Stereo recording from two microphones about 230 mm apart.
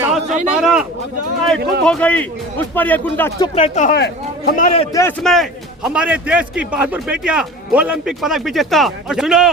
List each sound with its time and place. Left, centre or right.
0.0 s a sound: centre
0.5 s a man's voice: centre
3.4 s speech: left
4.9 s speech: centre
5.2 s a man's voice: centre